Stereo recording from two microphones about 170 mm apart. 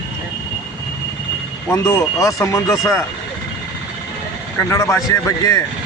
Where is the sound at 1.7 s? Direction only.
20° left (ahead or behind).